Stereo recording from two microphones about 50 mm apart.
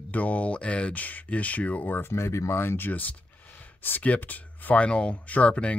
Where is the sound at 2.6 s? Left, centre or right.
Left.